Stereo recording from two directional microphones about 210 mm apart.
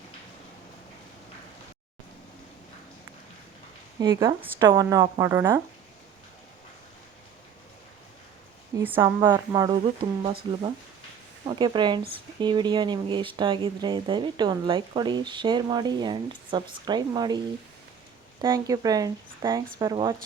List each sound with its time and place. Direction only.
4.0 s speech: 15° right (ahead or behind)
8.8 s speech: 10° right (ahead or behind)
11.4 s speech: 20° right (ahead or behind)
18.4 s speech: 15° right (ahead or behind)